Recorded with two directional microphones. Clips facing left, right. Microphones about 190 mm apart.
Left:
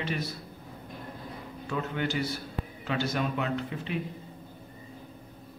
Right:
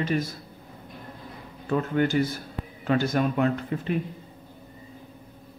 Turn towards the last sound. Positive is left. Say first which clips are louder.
# right 4 dB
turn(degrees=-45)  # may be behind; listen again after turning